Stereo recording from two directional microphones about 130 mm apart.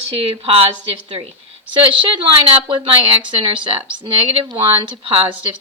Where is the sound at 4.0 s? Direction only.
35° right (ahead or behind).